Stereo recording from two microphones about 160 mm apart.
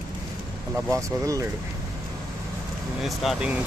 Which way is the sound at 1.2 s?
20° right (ahead or behind).